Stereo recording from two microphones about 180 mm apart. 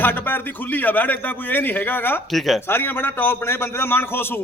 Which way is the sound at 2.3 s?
Centre (ahead or behind).